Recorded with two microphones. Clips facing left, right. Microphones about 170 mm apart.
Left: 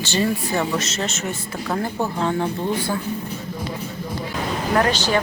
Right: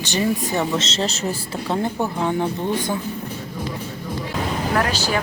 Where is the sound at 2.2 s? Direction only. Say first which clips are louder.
Even; 15° right (ahead or behind).